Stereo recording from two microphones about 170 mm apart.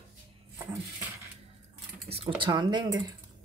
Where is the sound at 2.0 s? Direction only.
35° right (ahead or behind).